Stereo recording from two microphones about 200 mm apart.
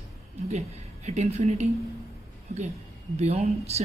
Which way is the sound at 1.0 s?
35° right (ahead or behind).